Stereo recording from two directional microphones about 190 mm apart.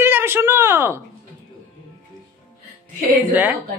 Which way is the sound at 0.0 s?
10° right (ahead or behind).